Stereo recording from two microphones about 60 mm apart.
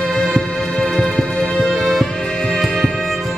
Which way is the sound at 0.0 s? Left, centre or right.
Centre.